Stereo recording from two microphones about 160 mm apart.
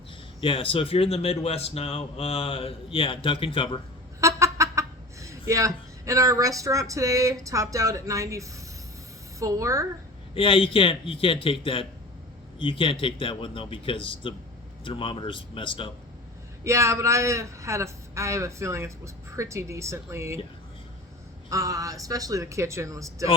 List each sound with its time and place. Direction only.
0.4 s a man's voice: 35° left (ahead or behind)
4.2 s speech: 20° right (ahead or behind)
10.3 s a man's voice: 35° left (ahead or behind)
16.6 s a man's voice: 20° right (ahead or behind)
21.5 s speech: 20° right (ahead or behind)